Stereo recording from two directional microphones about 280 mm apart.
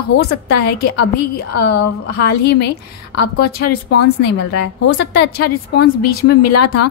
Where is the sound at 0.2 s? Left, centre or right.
Left.